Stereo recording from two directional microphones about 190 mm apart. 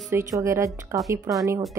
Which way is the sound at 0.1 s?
15° right (ahead or behind).